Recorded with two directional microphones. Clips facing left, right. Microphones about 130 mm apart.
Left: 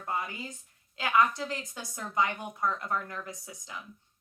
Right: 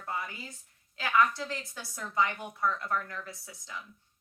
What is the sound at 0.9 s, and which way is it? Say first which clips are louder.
A woman's voice: left 1 dB; 20° left (ahead or behind).